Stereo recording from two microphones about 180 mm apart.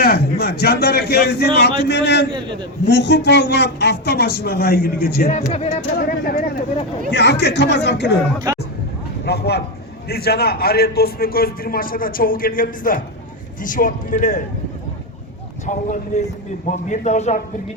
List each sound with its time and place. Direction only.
0.0 s a man's voice: 60° left (ahead or behind)
1.8 s a sound: 70° left (ahead or behind)
2.8 s a man's voice: 70° left (ahead or behind); by 6.4 s 55° left (ahead or behind)
7.1 s speech: 70° left (ahead or behind)
9.2 s a man's voice: 65° left (ahead or behind); by 14.4 s 45° left (ahead or behind)
15.6 s a man's voice: 45° left (ahead or behind)